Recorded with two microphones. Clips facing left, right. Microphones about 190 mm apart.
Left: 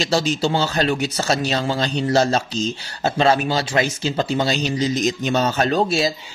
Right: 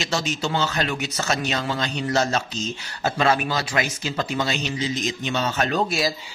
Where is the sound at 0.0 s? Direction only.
35° left (ahead or behind).